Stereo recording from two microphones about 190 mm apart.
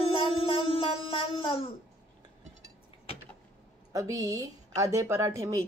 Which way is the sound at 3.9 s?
15° right (ahead or behind).